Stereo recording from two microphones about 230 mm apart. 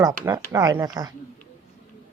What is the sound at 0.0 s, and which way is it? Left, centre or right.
Speech, centre.